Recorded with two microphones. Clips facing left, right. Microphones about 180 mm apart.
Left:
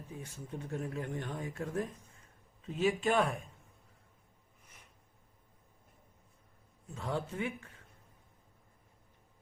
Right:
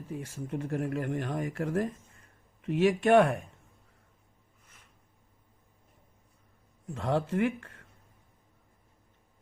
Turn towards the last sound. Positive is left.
turn(degrees=-90)